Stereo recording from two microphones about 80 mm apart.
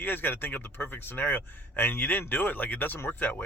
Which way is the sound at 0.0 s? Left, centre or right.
Left.